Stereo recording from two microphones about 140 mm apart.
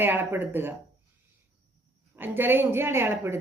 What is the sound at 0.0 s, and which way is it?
Speech, 15° right (ahead or behind).